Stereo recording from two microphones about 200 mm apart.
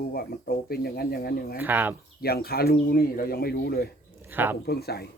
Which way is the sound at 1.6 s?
10° right (ahead or behind).